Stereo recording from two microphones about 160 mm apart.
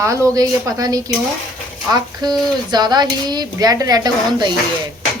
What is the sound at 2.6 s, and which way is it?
A woman's voice, 25° right (ahead or behind).